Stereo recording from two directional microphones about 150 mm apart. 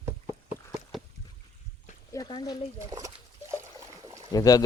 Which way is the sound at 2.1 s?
30° left (ahead or behind).